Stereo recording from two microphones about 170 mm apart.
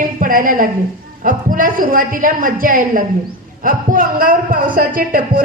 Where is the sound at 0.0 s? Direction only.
55° right (ahead or behind).